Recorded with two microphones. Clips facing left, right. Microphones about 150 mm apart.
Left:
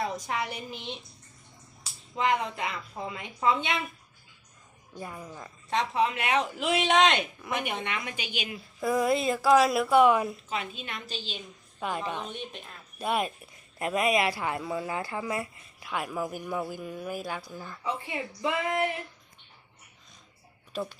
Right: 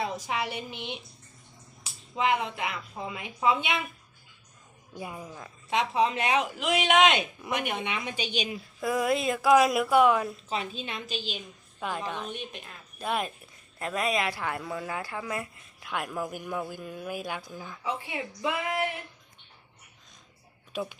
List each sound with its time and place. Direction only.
0.0 s a woman's voice: 5° right (ahead or behind)
2.1 s a woman's voice: 10° right (ahead or behind)
4.9 s a woman's voice: 10° right (ahead or behind)
5.3 s a woman's voice: centre (ahead or behind)
5.8 s speech: 20° right (ahead or behind)
6.6 s speech: centre (ahead or behind)
7.5 s speech: centre (ahead or behind)
7.9 s a woman's voice: 15° right (ahead or behind)
8.8 s speech: 5° right (ahead or behind)
10.5 s a woman's voice: 30° right (ahead or behind)
11.1 s a woman's voice: 10° right (ahead or behind)
12.3 s a woman's voice: 10° right (ahead or behind)
13.0 s a man's voice: 5° left (ahead or behind)